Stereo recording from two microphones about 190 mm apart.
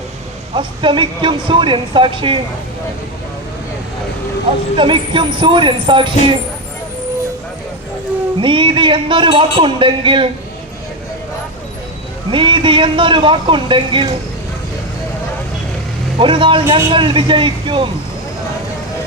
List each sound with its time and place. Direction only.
0.5 s speech: 25° right (ahead or behind)
4.8 s speech: 25° right (ahead or behind)
8.4 s speech: 25° right (ahead or behind)
12.3 s speech: 25° right (ahead or behind)
16.1 s speech: 25° right (ahead or behind)